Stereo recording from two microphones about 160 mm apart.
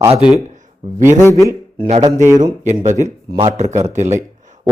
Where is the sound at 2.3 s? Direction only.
20° right (ahead or behind).